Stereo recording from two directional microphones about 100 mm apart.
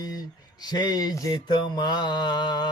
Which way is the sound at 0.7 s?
45° left (ahead or behind).